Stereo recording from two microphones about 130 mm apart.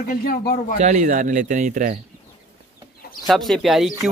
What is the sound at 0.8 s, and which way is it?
Speech, 65° right (ahead or behind).